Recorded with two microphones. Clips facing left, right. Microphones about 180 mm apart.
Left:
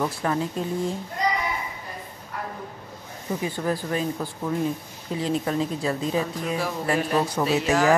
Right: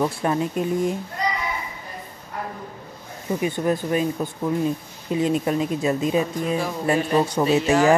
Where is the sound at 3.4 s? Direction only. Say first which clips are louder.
Right 5 dB; 20° right (ahead or behind).